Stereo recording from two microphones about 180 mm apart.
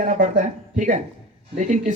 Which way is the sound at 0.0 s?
45° right (ahead or behind).